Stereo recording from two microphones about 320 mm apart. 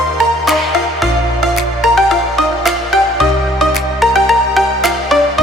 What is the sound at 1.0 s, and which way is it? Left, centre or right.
Music, centre.